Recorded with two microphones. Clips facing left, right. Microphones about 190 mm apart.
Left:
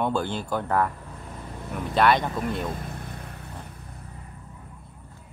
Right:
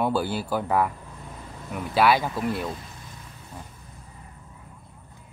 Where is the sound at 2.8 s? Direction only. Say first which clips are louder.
Left 7 dB; 60° left (ahead or behind).